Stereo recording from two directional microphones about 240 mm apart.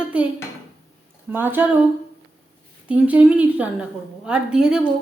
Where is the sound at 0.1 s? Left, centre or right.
Centre.